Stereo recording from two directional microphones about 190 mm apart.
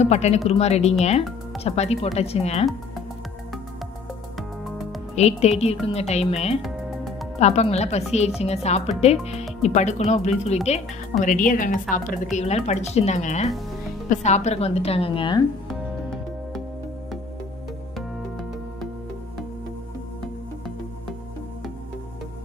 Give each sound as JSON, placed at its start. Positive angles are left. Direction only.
{"t": 0.0, "sound": "speech", "side_deg": 35}
{"t": 4.4, "sound": "music", "side_deg": 0}
{"t": 5.1, "sound": "speech", "side_deg": 35}
{"t": 6.6, "sound": "music", "side_deg": 0}
{"t": 7.3, "sound": "speech", "side_deg": 35}